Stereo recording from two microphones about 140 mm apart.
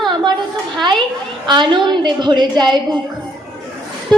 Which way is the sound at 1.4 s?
35° right (ahead or behind).